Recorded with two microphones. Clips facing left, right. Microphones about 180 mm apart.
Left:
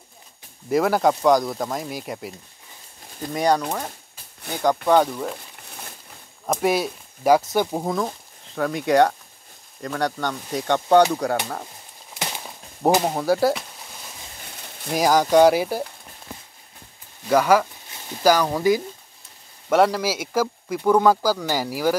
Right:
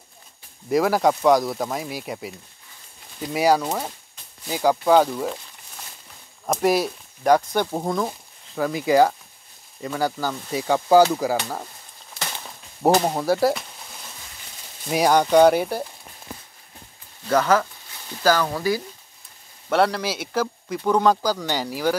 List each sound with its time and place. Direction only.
0.7 s speech: centre (ahead or behind)
3.3 s speech: 5° right (ahead or behind)
6.4 s speech: centre (ahead or behind)
12.1 s a sound: 10° left (ahead or behind)
12.9 s a sound: centre (ahead or behind)
14.9 s speech: centre (ahead or behind)
17.3 s speech: 10° left (ahead or behind)